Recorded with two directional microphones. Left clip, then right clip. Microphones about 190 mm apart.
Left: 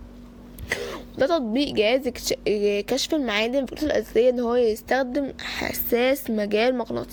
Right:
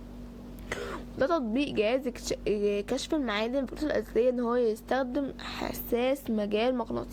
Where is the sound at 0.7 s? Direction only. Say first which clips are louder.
Left 7 dB; 35° left (ahead or behind).